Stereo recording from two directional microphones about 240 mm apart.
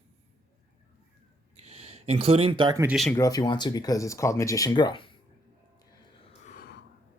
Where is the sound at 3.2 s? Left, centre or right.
Centre.